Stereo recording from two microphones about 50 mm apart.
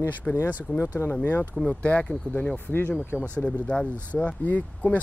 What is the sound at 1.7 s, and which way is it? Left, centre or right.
Speech, left.